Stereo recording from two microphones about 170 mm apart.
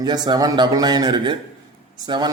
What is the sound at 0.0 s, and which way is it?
A man's voice, 25° right (ahead or behind).